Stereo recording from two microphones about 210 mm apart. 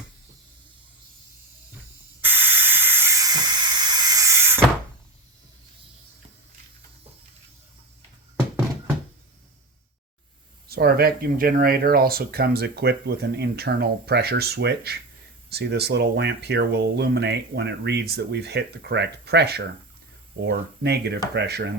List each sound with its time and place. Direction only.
2.2 s spray: 10° right (ahead or behind)
3.8 s a sound: 20° right (ahead or behind)
10.7 s speech: 50° right (ahead or behind)